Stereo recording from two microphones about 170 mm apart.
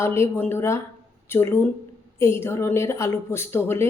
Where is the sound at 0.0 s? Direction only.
15° left (ahead or behind).